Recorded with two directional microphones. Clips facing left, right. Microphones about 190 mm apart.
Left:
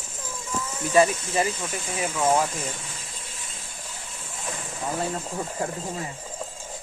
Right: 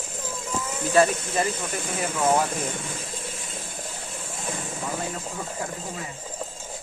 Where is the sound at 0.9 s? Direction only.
10° left (ahead or behind).